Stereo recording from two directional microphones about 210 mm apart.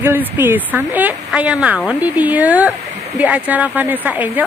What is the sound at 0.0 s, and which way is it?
Speech, 10° right (ahead or behind).